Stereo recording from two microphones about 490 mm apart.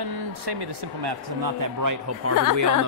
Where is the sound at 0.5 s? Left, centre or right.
Right.